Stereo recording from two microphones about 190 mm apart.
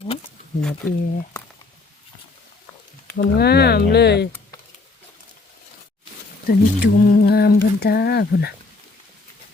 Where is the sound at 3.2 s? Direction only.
55° left (ahead or behind).